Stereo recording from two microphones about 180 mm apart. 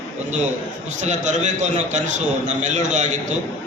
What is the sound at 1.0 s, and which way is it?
A man's voice, 40° right (ahead or behind).